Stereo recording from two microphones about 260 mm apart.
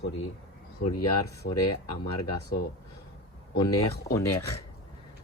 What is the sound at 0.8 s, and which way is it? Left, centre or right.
Speech, left.